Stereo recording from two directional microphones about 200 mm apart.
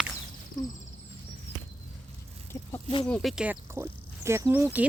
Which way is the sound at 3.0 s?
5° left (ahead or behind).